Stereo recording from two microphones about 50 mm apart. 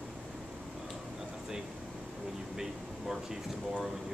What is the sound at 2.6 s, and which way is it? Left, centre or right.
Speech, centre.